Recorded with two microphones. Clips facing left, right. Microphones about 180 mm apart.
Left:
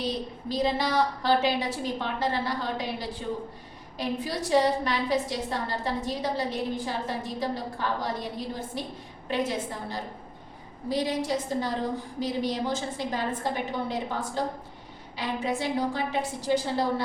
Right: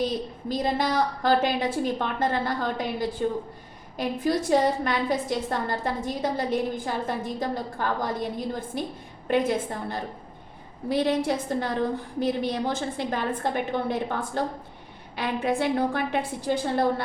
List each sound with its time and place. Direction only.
0.4 s a woman's voice: 50° right (ahead or behind)